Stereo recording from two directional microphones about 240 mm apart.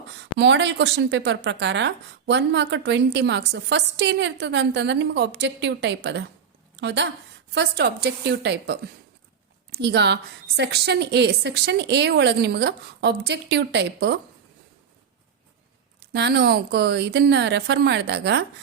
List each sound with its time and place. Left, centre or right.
0.3 s a woman's voice: right
16.1 s a woman's voice: right